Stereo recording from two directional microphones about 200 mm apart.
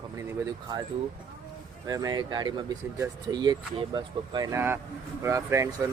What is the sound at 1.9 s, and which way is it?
Speech, 20° right (ahead or behind).